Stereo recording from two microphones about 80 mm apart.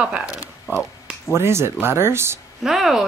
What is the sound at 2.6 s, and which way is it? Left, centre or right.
Speech, centre.